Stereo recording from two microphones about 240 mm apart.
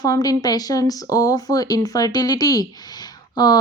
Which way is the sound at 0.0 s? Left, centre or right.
Centre.